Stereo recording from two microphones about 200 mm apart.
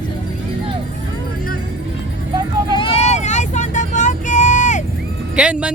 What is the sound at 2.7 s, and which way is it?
Vehicle, 30° left (ahead or behind).